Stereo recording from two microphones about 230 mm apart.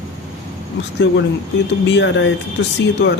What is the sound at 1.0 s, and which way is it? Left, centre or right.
Speech, left.